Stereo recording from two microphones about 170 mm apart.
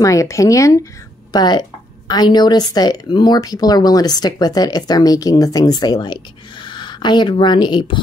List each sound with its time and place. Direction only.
0.0 s a woman's voice: 20° left (ahead or behind)